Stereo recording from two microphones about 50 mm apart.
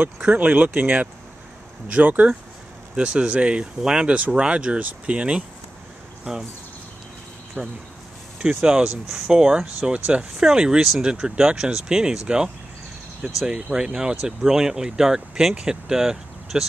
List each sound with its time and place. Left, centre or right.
0.3 s speech: right
7.6 s speech: right
10.3 s speech: centre
13.4 s speech: centre